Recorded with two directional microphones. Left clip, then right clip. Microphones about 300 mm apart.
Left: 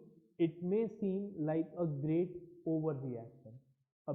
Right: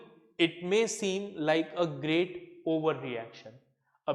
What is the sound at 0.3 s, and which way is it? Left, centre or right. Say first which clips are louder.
A man's voice: right 7 dB; centre.